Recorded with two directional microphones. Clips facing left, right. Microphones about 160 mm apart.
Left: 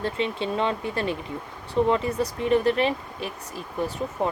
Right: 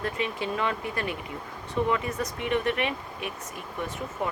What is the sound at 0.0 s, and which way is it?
Speech, 25° left (ahead or behind).